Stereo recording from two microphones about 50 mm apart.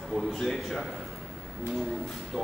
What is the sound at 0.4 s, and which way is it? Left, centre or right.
Speech, centre.